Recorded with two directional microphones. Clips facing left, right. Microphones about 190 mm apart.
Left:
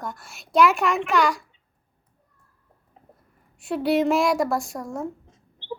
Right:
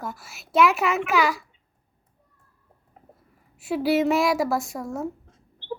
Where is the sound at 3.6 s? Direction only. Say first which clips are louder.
Even; 5° right (ahead or behind).